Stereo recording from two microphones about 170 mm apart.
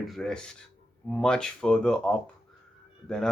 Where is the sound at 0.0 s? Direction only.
Centre (ahead or behind).